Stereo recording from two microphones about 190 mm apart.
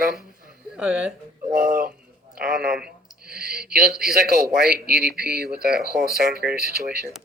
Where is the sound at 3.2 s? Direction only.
55° right (ahead or behind).